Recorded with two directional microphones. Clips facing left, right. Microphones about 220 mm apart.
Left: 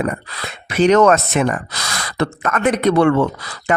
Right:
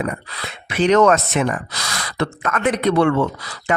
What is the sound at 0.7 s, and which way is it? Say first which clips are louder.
Speech: left 2 dB; 45° left (ahead or behind).